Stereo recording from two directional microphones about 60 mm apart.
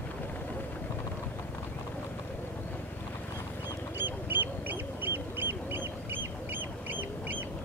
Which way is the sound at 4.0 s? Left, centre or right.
Right.